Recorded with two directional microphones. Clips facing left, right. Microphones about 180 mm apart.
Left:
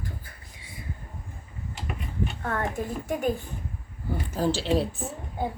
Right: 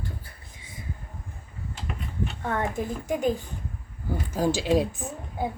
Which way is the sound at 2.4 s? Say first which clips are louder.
Right 3 dB; 15° right (ahead or behind).